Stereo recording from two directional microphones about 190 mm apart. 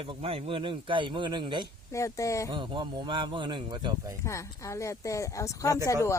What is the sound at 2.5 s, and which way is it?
Speech, 25° right (ahead or behind).